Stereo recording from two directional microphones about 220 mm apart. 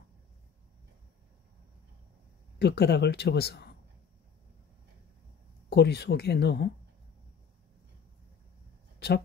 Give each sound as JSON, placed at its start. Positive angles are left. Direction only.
{"t": 2.6, "sound": "speech", "side_deg": 50}
{"t": 5.7, "sound": "speech", "side_deg": 50}